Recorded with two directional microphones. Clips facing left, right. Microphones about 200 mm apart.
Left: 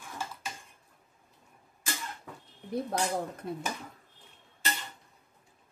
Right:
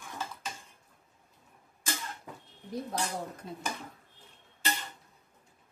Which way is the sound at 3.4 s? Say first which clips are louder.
Left 6 dB; 60° left (ahead or behind).